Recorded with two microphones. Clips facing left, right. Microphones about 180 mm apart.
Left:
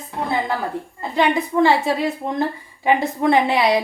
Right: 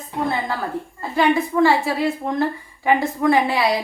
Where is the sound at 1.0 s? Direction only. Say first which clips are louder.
Right 1 dB; 20° left (ahead or behind).